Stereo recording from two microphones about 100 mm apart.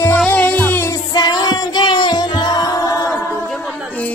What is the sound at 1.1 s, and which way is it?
Music, 40° left (ahead or behind).